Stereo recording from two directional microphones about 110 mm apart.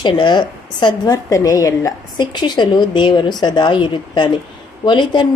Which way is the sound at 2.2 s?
45° left (ahead or behind).